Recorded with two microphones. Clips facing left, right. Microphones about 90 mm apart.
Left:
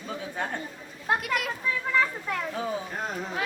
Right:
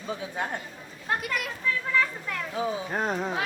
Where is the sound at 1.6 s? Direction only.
20° left (ahead or behind).